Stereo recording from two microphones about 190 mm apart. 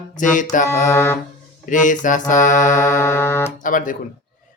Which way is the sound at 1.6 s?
40° left (ahead or behind).